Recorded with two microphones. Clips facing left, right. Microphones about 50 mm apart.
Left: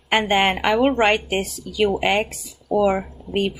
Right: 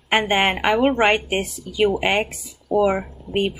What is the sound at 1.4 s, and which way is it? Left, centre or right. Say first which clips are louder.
Speech: even; right.